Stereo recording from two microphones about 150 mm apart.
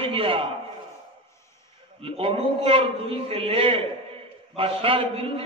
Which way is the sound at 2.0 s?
40° right (ahead or behind).